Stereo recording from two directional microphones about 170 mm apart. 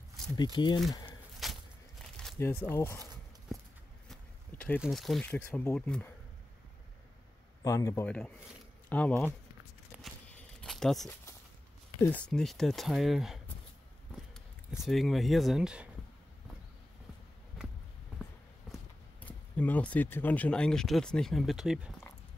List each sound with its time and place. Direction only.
0.4 s speech: 25° left (ahead or behind)
1.4 s a sound: centre (ahead or behind)
2.3 s speech: 15° left (ahead or behind)
4.1 s a sound: 10° left (ahead or behind)
4.7 s speech: centre (ahead or behind)
5.3 s speech: 10° left (ahead or behind)
7.6 s speech: 20° left (ahead or behind)
8.8 s speech: 10° left (ahead or behind)
10.6 s a sound: centre (ahead or behind)
12.0 s speech: 10° left (ahead or behind)
14.8 s speech: centre (ahead or behind)
18.7 s walk: centre (ahead or behind)
19.2 s speech: 10° left (ahead or behind)